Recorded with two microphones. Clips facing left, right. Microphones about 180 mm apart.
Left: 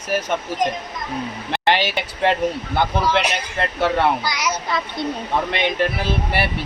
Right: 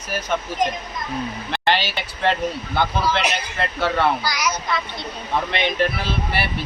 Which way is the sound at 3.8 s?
20° left (ahead or behind).